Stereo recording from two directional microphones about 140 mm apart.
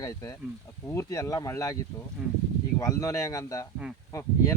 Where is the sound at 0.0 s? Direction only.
25° left (ahead or behind).